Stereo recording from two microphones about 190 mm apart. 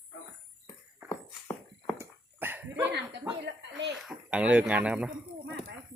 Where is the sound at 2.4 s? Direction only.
10° right (ahead or behind).